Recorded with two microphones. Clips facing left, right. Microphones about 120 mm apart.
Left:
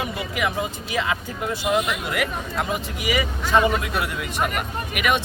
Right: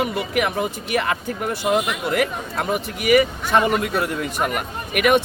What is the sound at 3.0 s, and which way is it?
Speech, 60° right (ahead or behind).